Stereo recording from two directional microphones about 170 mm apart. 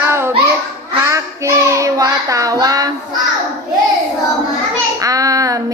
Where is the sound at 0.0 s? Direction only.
15° right (ahead or behind).